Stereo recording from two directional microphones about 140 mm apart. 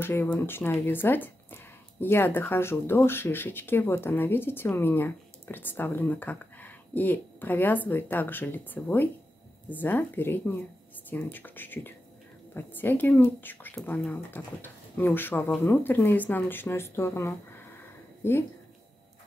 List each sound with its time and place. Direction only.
0.0 s speech: 15° left (ahead or behind)